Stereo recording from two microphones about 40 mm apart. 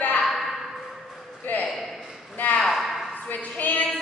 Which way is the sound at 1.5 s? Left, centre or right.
Left.